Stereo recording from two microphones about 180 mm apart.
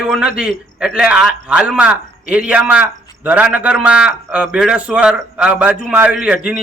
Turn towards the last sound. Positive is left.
turn(degrees=-5)  # may be behind; listen again after turning